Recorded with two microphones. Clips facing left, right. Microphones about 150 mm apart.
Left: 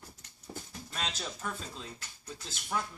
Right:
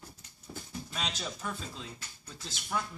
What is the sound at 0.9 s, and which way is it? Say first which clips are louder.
Speech: even; centre (ahead or behind).